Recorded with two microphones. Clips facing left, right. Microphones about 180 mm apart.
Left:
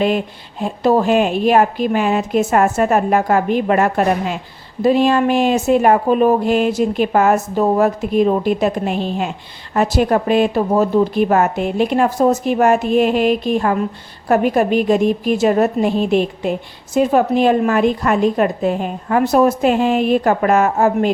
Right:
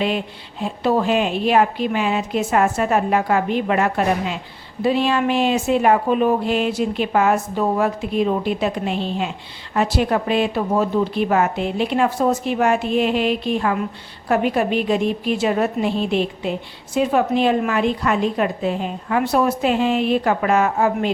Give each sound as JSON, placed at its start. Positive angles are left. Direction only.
{"t": 0.6, "sound": "a woman's voice", "side_deg": 40}